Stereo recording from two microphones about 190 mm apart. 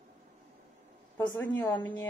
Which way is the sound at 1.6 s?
25° left (ahead or behind).